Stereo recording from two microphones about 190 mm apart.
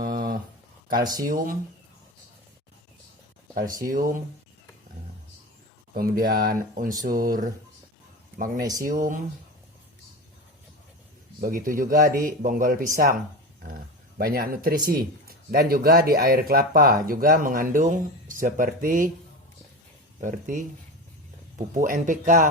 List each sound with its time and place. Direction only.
0.0 s a sound: 50° right (ahead or behind)
1.0 s speech: 20° right (ahead or behind)
1.3 s speech: 45° right (ahead or behind)
3.8 s speech: 45° right (ahead or behind)
5.9 s speech: 50° right (ahead or behind)
8.5 s speech: 20° right (ahead or behind)
8.8 s speech: 45° right (ahead or behind)
11.3 s speech: 50° right (ahead or behind)
14.2 s speech: 50° right (ahead or behind)
20.2 s speech: 45° right (ahead or behind)
21.7 s speech: 45° right (ahead or behind)